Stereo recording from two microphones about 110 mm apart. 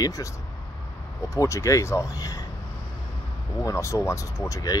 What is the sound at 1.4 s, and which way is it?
Speech, 30° left (ahead or behind).